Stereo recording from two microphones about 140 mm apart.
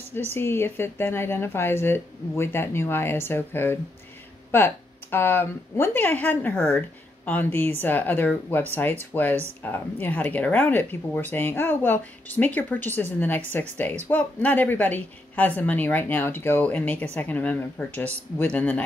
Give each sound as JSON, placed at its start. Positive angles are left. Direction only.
{"t": 0.1, "sound": "speech", "side_deg": 15}